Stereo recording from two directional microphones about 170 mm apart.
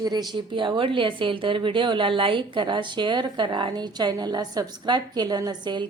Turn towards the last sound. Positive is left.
turn(degrees=-25)  # may be behind; listen again after turning